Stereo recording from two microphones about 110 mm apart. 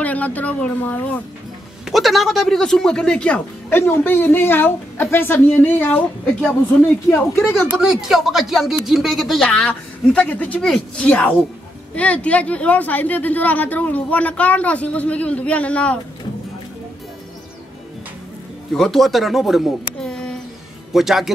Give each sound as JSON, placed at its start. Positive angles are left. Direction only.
{"t": 0.0, "sound": "speech", "side_deg": 15}
{"t": 1.9, "sound": "speech", "side_deg": 0}
{"t": 7.5, "sound": "speech", "side_deg": -5}
{"t": 9.7, "sound": "speech", "side_deg": 15}
{"t": 18.7, "sound": "speech", "side_deg": 5}